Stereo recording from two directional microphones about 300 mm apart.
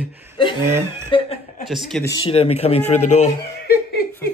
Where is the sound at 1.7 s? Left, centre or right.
Centre.